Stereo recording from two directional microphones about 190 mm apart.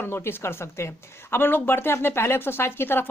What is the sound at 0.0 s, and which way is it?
Speech, 10° left (ahead or behind).